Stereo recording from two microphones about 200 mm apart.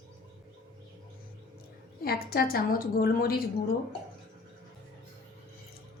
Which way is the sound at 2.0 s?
50° left (ahead or behind).